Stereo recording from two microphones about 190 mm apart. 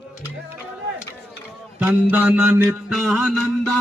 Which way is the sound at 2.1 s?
10° right (ahead or behind).